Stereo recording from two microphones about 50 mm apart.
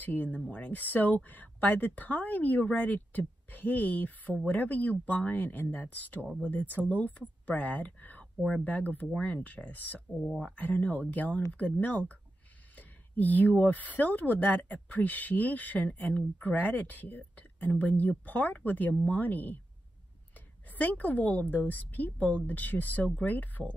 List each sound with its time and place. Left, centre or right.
0.0 s speech: left